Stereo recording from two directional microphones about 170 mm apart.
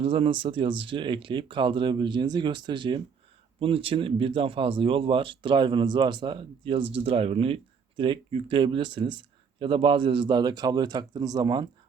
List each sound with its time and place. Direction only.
0.0 s speech: 30° right (ahead or behind)